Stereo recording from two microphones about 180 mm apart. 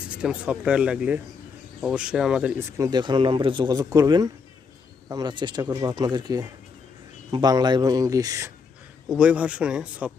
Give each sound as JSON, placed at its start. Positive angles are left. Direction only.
{"t": 0.1, "sound": "speech", "side_deg": -5}
{"t": 9.0, "sound": "speech", "side_deg": -5}